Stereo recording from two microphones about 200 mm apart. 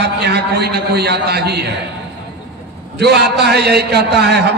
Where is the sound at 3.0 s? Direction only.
55° right (ahead or behind).